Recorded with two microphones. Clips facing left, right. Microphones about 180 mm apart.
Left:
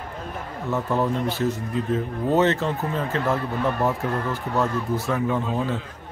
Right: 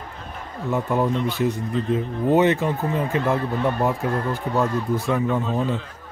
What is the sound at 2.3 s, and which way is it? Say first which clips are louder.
Speech: right 2 dB; 15° right (ahead or behind).